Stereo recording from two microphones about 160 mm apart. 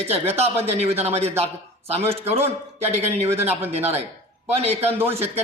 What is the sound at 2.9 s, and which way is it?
Speech, 40° right (ahead or behind).